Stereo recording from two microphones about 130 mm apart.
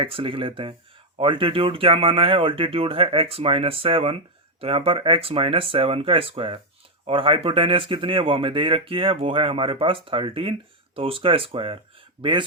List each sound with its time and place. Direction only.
0.0 s speech: 45° right (ahead or behind)